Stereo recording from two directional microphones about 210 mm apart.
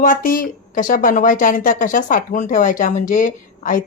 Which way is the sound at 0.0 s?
40° left (ahead or behind).